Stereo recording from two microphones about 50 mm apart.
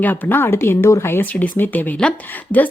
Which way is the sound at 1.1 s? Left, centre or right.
Left.